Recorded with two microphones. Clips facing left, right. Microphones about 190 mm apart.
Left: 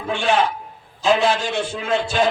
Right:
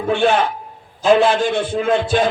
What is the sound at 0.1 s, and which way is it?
A man's voice, 55° right (ahead or behind).